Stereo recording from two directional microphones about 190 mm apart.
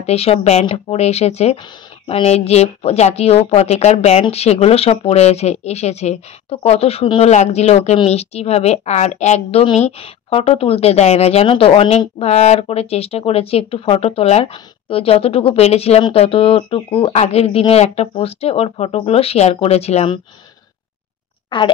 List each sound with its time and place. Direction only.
0.0 s a woman's voice: 30° left (ahead or behind)